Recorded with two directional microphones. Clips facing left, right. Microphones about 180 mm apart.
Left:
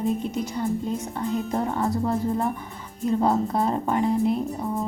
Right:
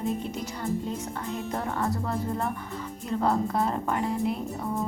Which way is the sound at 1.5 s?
15° left (ahead or behind).